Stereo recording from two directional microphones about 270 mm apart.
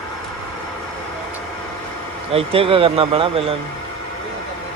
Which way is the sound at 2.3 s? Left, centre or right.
Right.